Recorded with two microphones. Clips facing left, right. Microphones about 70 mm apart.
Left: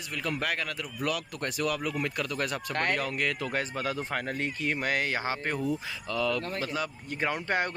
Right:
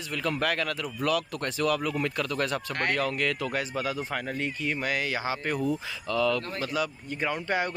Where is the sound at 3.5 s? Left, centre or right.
Left.